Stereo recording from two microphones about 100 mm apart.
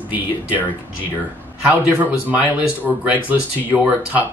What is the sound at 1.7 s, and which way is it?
Speech, 15° right (ahead or behind).